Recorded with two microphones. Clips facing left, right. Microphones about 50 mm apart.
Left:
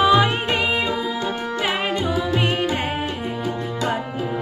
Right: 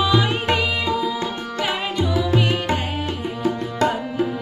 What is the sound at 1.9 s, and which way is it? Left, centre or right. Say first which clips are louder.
Music: right 1 dB; left.